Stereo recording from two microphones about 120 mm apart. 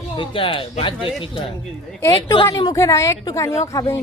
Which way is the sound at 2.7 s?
25° left (ahead or behind).